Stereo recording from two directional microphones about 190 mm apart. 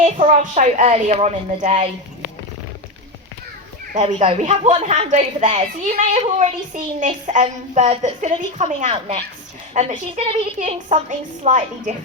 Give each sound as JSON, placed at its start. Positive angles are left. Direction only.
{"t": 0.2, "sound": "a woman's voice", "side_deg": -40}
{"t": 3.9, "sound": "a woman's voice", "side_deg": -35}